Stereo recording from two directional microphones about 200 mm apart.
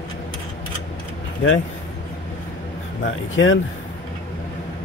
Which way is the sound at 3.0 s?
70° left (ahead or behind).